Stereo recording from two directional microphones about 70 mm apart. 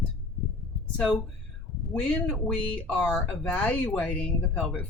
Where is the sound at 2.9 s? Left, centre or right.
Centre.